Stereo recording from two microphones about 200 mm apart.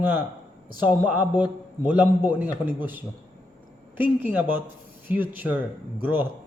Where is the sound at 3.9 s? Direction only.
10° right (ahead or behind).